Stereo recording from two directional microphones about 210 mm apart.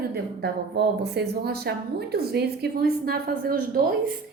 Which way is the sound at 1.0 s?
50° right (ahead or behind).